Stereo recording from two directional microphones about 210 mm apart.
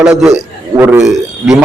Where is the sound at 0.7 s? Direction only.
15° right (ahead or behind).